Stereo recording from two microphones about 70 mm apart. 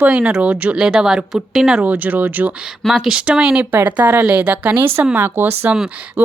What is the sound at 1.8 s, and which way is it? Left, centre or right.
Speech, right.